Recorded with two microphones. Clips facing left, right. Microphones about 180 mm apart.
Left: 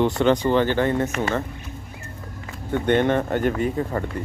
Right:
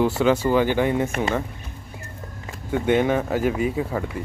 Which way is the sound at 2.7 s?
5° right (ahead or behind).